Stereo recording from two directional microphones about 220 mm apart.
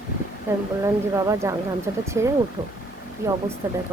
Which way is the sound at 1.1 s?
15° right (ahead or behind).